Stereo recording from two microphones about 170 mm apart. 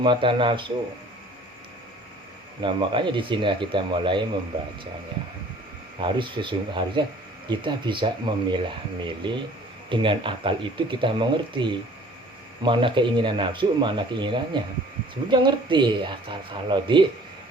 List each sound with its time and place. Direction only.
0.0 s speech: 30° right (ahead or behind)
2.6 s speech: 30° right (ahead or behind)
6.0 s speech: 30° right (ahead or behind)